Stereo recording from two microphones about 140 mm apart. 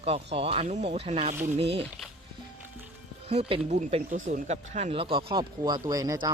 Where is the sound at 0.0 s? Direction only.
45° right (ahead or behind).